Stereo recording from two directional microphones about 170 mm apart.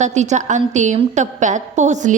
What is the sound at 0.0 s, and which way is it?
A woman's voice, 45° right (ahead or behind).